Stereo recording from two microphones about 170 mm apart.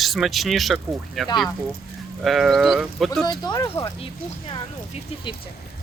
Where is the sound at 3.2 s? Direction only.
25° left (ahead or behind).